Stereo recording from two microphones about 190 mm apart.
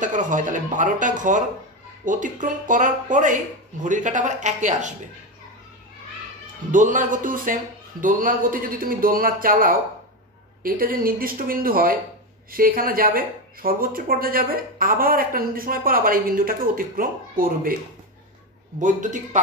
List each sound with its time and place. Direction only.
0.0 s speech: 40° right (ahead or behind)
6.7 s speech: 45° right (ahead or behind)
18.8 s speech: 40° right (ahead or behind)